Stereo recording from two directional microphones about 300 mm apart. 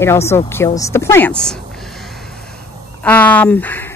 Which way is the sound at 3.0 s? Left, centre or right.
Centre.